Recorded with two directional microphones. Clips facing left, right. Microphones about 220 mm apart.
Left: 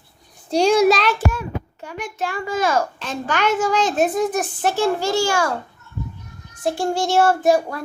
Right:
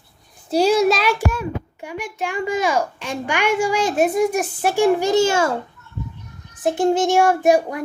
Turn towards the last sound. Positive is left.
turn(degrees=-15)  # may be behind; listen again after turning